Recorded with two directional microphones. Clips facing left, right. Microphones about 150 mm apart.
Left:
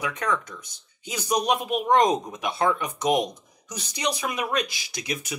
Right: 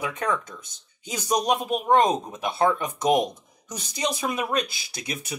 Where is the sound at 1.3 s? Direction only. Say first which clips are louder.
Right 1 dB; 45° right (ahead or behind).